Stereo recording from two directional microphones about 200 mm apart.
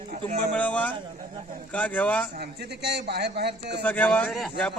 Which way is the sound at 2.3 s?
55° right (ahead or behind).